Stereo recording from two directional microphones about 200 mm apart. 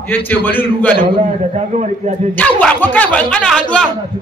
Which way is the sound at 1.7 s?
35° right (ahead or behind).